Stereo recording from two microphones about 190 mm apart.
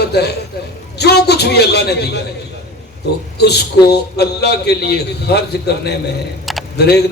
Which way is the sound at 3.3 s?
60° left (ahead or behind).